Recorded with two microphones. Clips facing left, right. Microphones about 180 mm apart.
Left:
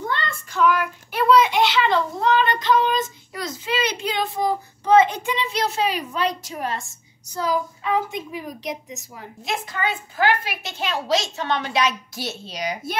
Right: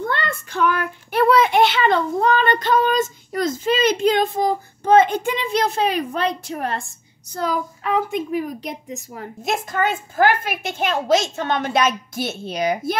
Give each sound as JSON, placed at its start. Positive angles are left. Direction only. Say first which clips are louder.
{"t": 0.1, "sound": "child singing", "louder": "right 3 dB", "side_deg": -55}
{"t": 1.1, "sound": "a child's voice", "louder": "right 2 dB", "side_deg": -55}